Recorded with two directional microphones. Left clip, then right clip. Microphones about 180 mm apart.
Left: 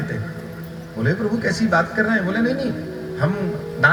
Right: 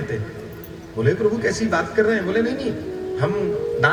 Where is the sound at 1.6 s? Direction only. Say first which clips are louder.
Left 1 dB; 25° left (ahead or behind).